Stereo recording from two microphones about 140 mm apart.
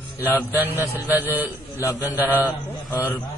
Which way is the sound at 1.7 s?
25° left (ahead or behind).